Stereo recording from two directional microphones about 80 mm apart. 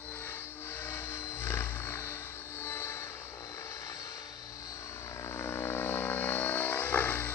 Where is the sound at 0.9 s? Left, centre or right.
Left.